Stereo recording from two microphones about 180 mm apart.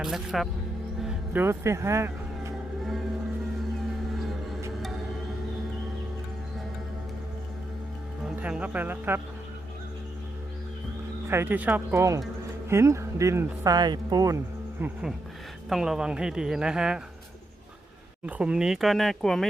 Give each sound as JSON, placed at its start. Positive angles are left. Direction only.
{"t": 0.0, "sound": "speech", "side_deg": 0}
{"t": 1.0, "sound": "music", "side_deg": -10}
{"t": 8.2, "sound": "speech", "side_deg": -5}
{"t": 11.3, "sound": "speech", "side_deg": -10}
{"t": 18.3, "sound": "speech", "side_deg": -5}